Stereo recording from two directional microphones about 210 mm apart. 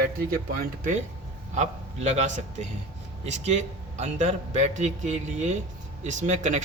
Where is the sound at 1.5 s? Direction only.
35° right (ahead or behind).